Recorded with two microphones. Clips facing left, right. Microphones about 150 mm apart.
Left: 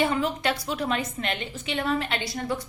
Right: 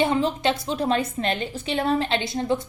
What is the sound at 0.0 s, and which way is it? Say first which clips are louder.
A woman's voice: right 3 dB; 25° right (ahead or behind).